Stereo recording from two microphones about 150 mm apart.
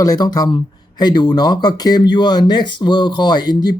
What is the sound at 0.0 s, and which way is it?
Speech, 25° left (ahead or behind).